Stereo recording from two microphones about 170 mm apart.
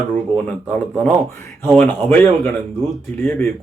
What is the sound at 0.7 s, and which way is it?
Speech, 10° left (ahead or behind).